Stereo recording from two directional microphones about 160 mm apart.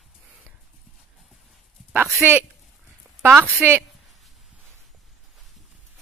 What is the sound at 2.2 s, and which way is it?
A woman's voice, 10° right (ahead or behind).